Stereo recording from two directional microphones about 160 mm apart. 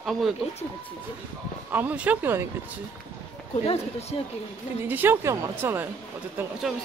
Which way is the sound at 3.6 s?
40° left (ahead or behind).